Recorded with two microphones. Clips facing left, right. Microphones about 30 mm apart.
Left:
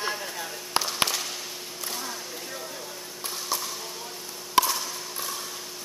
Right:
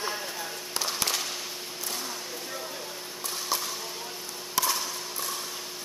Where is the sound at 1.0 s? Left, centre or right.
Centre.